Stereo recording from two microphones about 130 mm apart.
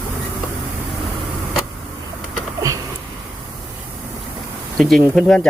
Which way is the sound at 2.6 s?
25° right (ahead or behind).